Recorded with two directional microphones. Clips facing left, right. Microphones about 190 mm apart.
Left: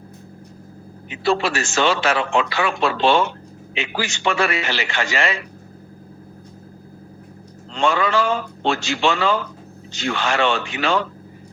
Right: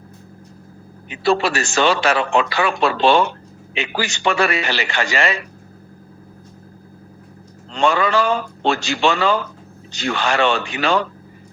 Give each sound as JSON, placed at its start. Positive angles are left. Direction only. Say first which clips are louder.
{"t": 1.2, "sound": "a man's voice", "louder": "right 2 dB", "side_deg": -40}
{"t": 7.7, "sound": "a man's voice", "louder": "right 2 dB", "side_deg": -40}